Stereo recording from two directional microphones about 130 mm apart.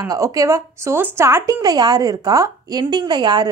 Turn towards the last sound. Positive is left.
turn(degrees=-35)  # may be behind; listen again after turning